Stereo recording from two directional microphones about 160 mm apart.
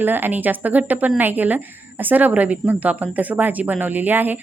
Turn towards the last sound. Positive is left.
turn(degrees=-10)  # may be behind; listen again after turning